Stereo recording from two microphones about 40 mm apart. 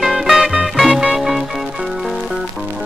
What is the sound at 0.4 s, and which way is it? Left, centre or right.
Music, centre.